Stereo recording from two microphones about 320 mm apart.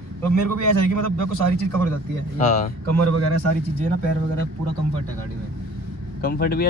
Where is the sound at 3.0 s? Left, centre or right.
Right.